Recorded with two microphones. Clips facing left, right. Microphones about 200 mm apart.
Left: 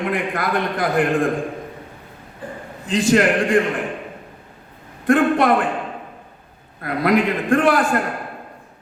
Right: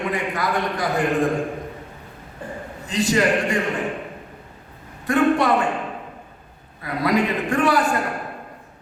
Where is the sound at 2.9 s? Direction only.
55° left (ahead or behind).